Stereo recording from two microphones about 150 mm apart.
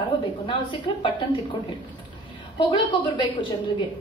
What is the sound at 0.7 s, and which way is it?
Speech, 30° left (ahead or behind).